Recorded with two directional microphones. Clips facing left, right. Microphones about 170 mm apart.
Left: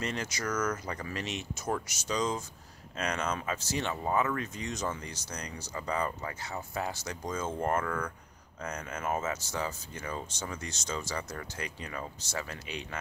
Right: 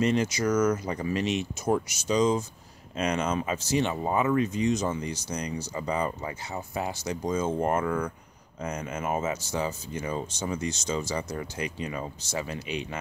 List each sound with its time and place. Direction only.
0.0 s speech: 20° right (ahead or behind)